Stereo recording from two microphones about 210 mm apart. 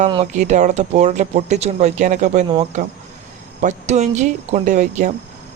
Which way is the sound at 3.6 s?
35° right (ahead or behind).